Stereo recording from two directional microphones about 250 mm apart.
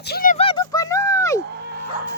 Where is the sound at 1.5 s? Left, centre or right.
Right.